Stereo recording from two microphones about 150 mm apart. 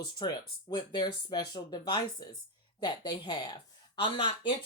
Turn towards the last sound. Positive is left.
turn(degrees=35)  # may be behind; listen again after turning